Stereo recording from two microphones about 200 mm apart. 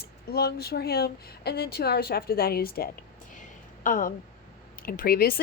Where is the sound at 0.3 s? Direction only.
50° left (ahead or behind).